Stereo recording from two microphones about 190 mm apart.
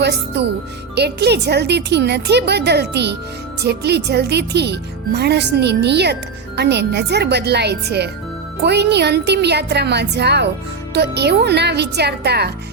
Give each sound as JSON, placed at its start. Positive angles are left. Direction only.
{"t": 0.0, "sound": "speech", "side_deg": -60}